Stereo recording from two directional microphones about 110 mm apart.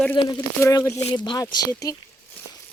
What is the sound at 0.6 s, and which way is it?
Speech, 25° left (ahead or behind).